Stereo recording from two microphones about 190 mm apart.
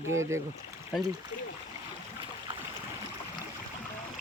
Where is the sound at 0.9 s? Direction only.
Centre (ahead or behind).